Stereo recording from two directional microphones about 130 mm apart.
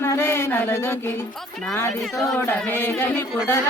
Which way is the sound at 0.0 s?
20° left (ahead or behind).